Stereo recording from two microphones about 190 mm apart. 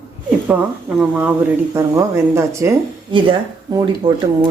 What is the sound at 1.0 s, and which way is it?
A woman's voice, 5° right (ahead or behind).